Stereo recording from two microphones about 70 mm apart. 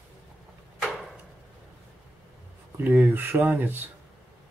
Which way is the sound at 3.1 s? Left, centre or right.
Right.